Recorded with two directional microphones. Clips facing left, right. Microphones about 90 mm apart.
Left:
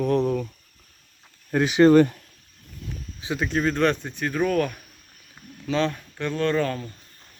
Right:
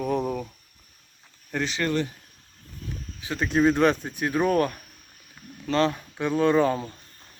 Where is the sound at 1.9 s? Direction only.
55° left (ahead or behind).